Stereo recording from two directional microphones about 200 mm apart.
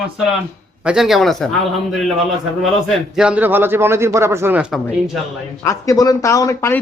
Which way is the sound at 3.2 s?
5° right (ahead or behind).